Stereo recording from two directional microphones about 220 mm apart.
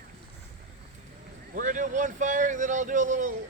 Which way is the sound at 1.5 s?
35° right (ahead or behind).